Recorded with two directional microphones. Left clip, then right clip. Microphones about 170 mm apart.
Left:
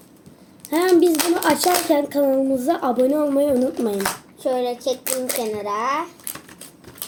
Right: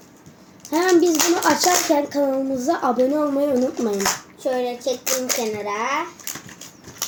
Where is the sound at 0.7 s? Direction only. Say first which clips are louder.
Left 1 dB; 15° left (ahead or behind).